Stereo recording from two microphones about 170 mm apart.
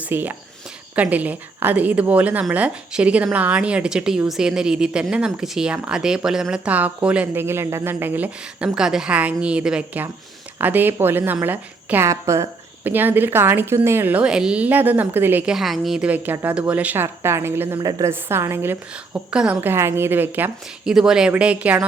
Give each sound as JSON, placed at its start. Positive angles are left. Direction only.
{"t": 0.0, "sound": "a woman's voice", "side_deg": -10}